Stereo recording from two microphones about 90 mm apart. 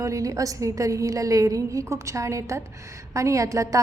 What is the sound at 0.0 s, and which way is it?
A woman's voice, 35° right (ahead or behind).